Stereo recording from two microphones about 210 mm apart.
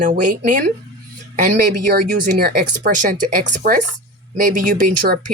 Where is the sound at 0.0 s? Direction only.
40° right (ahead or behind).